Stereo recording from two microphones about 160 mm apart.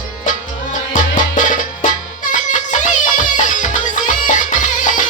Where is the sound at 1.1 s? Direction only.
55° left (ahead or behind).